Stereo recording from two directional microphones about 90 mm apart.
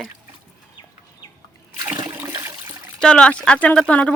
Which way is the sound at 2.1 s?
30° right (ahead or behind).